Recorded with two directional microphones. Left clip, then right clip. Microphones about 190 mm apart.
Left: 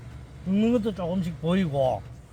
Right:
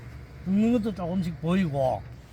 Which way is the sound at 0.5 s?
5° left (ahead or behind).